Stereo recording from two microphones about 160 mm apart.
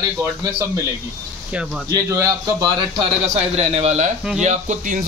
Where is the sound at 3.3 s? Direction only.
45° right (ahead or behind).